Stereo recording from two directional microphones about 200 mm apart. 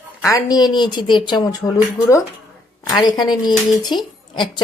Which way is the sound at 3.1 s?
20° left (ahead or behind).